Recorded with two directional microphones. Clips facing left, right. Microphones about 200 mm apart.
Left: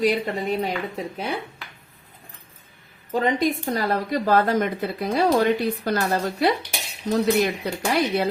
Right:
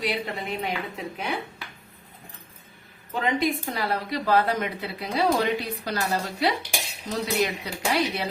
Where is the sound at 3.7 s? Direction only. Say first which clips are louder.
Left 4 dB; 45° left (ahead or behind).